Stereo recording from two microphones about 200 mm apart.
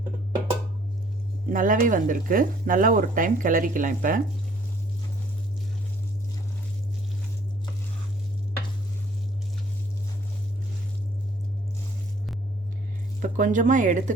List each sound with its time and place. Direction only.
1.5 s speech: 40° right (ahead or behind)
13.2 s speech: 40° right (ahead or behind)